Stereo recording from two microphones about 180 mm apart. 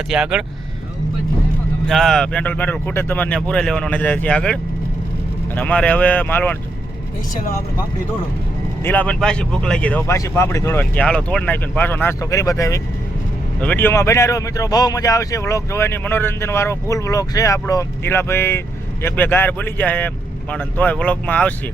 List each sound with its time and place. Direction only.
0.1 s speech: 5° right (ahead or behind)
1.9 s speech: centre (ahead or behind)
8.8 s speech: 10° left (ahead or behind)